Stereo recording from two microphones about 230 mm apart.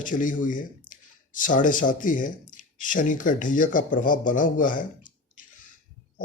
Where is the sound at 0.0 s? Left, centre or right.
Left.